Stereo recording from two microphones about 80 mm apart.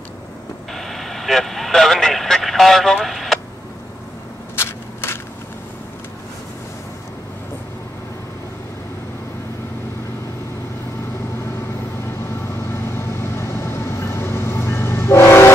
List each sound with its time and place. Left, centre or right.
0.7 s vehicle: centre
4.6 s crushing: left
12.5 s vehicle: left